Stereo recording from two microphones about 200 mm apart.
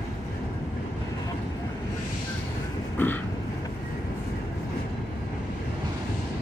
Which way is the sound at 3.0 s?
10° left (ahead or behind).